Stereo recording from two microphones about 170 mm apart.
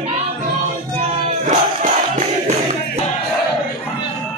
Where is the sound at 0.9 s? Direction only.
45° right (ahead or behind).